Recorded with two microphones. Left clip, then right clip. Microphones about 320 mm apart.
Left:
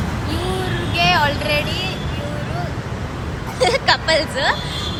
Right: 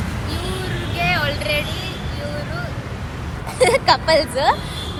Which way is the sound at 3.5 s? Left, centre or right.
Centre.